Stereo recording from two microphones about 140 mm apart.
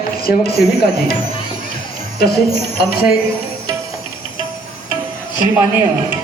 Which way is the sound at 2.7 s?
90° left.